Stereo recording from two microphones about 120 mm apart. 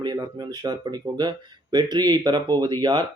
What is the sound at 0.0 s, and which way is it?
Speech, 35° right (ahead or behind).